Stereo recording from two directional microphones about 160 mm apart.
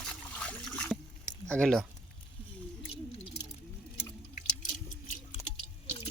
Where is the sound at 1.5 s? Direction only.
5° left (ahead or behind).